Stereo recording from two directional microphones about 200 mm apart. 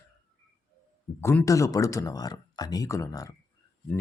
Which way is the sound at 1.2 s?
10° left (ahead or behind).